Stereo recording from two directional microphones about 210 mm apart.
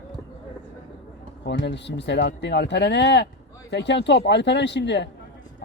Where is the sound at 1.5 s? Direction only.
55° left (ahead or behind).